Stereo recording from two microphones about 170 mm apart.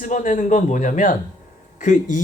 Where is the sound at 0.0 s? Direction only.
50° left (ahead or behind).